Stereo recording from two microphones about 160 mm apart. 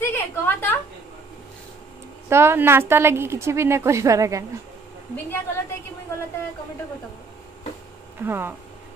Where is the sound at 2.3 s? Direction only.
15° right (ahead or behind).